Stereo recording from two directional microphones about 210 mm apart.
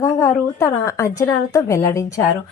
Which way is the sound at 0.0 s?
15° left (ahead or behind).